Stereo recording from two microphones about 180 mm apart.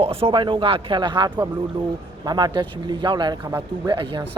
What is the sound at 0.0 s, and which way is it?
Speech, 30° right (ahead or behind).